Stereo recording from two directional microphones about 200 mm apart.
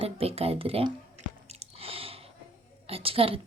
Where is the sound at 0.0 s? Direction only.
30° right (ahead or behind).